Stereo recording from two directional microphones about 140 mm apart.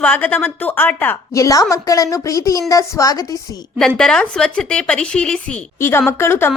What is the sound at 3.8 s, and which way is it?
A woman's voice, 5° left (ahead or behind).